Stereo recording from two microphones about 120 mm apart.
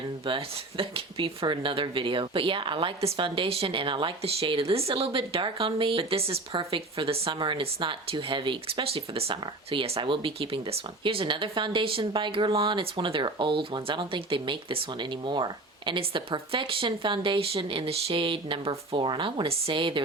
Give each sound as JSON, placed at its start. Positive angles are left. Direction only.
{"t": 0.3, "sound": "speech", "side_deg": -50}
{"t": 15.9, "sound": "speech", "side_deg": -45}
{"t": 19.0, "sound": "speech", "side_deg": -40}